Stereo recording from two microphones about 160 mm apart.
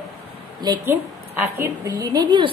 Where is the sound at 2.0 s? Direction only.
25° right (ahead or behind).